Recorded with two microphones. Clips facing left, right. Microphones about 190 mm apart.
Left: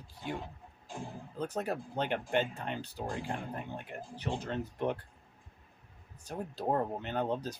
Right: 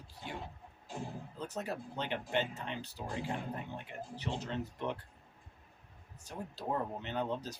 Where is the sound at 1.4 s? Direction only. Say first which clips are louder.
Left 5 dB; 55° left (ahead or behind).